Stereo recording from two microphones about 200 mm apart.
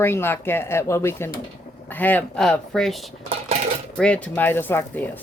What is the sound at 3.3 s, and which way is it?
Dishes, 35° right (ahead or behind).